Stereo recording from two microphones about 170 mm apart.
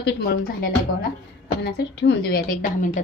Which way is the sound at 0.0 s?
65° left (ahead or behind).